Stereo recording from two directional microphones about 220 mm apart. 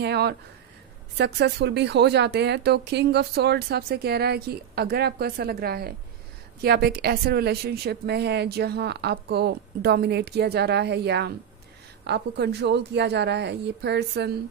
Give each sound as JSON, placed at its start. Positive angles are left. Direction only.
{"t": 0.0, "sound": "speech", "side_deg": -50}